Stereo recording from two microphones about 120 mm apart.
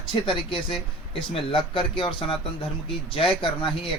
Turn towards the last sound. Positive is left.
turn(degrees=45)  # may be behind; listen again after turning